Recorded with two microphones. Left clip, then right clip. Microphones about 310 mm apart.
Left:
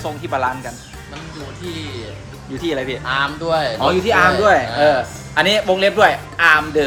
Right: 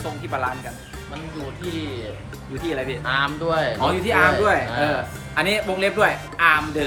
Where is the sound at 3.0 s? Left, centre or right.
Centre.